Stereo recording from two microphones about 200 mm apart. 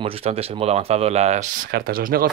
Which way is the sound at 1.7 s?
45° right (ahead or behind).